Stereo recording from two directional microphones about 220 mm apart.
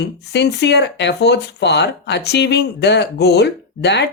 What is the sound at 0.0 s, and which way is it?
Speech, 50° left (ahead or behind).